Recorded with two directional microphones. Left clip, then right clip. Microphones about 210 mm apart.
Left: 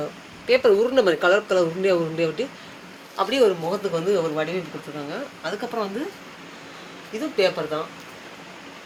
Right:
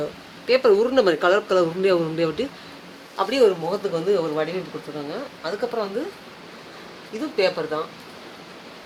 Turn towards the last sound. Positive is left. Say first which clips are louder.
# even
turn(degrees=0)  # may be behind; listen again after turning